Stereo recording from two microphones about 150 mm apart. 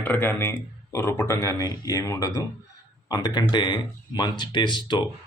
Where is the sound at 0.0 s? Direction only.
15° left (ahead or behind).